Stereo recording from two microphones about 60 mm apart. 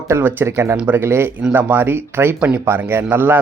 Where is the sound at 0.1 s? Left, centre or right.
Right.